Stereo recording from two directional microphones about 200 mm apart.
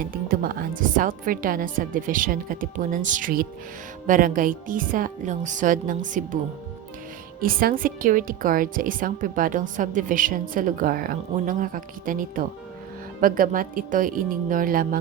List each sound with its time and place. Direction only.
0.0 s a woman's voice: 45° right (ahead or behind)
7.4 s a woman's voice: 45° right (ahead or behind)